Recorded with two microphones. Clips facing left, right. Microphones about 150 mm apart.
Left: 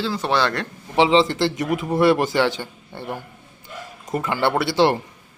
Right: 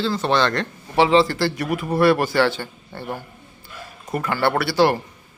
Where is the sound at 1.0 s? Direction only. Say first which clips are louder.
Even; 20° left (ahead or behind).